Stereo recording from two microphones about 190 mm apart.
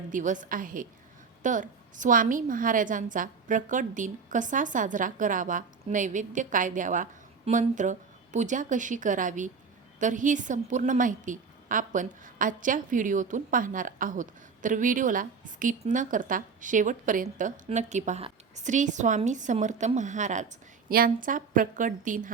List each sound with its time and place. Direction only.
0.1 s a woman's voice: 45° right (ahead or behind)